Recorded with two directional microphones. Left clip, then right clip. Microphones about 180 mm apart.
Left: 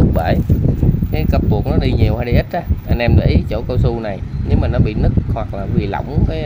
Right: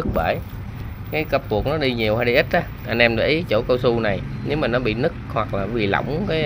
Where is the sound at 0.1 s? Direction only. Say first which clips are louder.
Left 3 dB; 20° left (ahead or behind).